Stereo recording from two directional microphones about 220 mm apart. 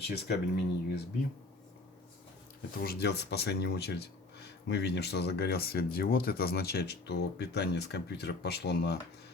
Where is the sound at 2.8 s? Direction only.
50° left (ahead or behind).